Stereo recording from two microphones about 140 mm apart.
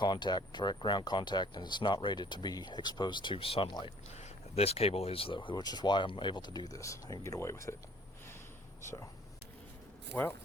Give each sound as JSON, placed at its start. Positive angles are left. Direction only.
{"t": 0.0, "sound": "speech", "side_deg": 30}
{"t": 4.1, "sound": "speech", "side_deg": 50}
{"t": 10.1, "sound": "speech", "side_deg": 15}